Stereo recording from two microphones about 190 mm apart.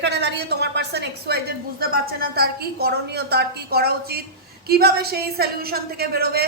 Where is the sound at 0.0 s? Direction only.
65° right (ahead or behind).